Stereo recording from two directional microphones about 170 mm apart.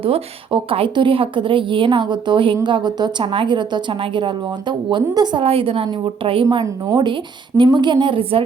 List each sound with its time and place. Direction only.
0.0 s a woman's voice: 30° right (ahead or behind)